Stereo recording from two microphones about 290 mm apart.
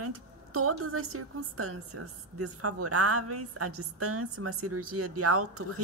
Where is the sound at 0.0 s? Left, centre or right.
Right.